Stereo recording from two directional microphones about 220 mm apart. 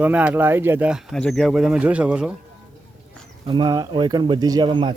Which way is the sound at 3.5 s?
20° right (ahead or behind).